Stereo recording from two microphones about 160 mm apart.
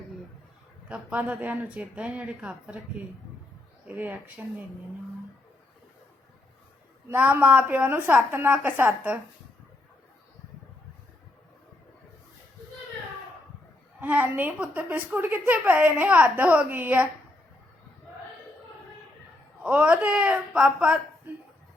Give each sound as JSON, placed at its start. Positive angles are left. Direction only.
{"t": 0.9, "sound": "a woman's voice", "side_deg": -10}
{"t": 3.8, "sound": "a woman's voice", "side_deg": -10}
{"t": 7.1, "sound": "a woman's voice", "side_deg": -10}
{"t": 14.0, "sound": "a woman's voice", "side_deg": -10}
{"t": 19.6, "sound": "a woman's voice", "side_deg": -5}